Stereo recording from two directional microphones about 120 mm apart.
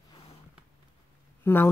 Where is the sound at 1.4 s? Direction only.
20° left (ahead or behind).